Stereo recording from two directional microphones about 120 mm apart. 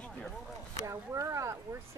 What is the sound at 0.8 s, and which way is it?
Speech, 25° right (ahead or behind).